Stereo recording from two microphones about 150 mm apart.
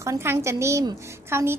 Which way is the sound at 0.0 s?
20° right (ahead or behind).